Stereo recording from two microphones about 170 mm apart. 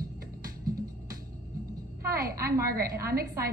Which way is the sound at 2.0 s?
60° right (ahead or behind).